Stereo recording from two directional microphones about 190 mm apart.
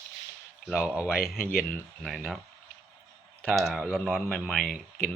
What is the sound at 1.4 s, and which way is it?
Speech, 50° left (ahead or behind).